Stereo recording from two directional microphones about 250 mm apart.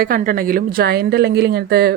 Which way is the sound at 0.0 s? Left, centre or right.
Right.